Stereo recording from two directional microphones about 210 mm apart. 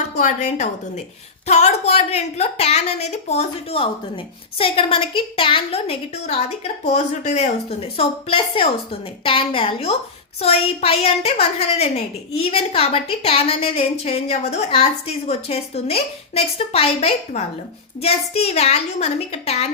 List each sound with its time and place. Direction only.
0.2 s a woman's voice: 35° left (ahead or behind)